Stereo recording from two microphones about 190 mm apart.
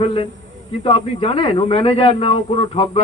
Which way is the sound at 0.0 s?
30° left (ahead or behind).